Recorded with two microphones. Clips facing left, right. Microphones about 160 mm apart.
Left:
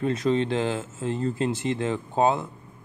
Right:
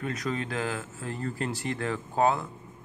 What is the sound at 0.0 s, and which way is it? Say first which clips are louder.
Speech: left 8 dB; 30° left (ahead or behind).